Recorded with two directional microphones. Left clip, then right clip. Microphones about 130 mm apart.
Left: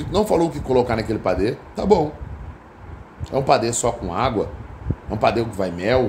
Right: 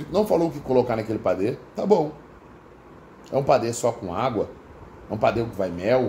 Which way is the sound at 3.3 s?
15° left (ahead or behind).